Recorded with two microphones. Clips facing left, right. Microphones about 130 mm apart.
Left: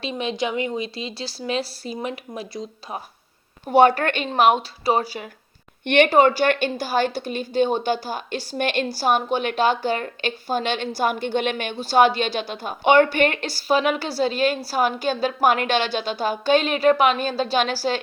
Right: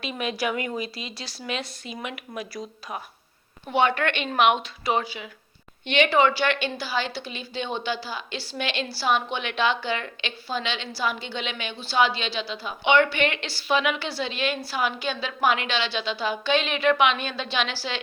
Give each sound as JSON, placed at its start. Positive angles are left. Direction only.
{"t": 0.0, "sound": "speech", "side_deg": 30}
{"t": 3.7, "sound": "speech", "side_deg": 40}
{"t": 5.8, "sound": "a woman's voice", "side_deg": 55}